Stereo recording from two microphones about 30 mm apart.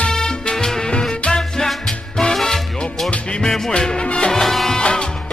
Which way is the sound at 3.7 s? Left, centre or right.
Left.